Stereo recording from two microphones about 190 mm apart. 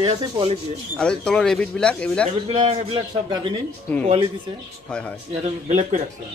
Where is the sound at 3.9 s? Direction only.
5° left (ahead or behind).